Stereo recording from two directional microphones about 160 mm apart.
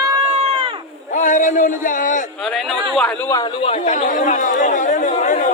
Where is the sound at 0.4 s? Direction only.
35° right (ahead or behind).